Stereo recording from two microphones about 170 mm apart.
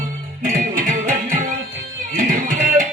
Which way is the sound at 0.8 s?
50° right (ahead or behind).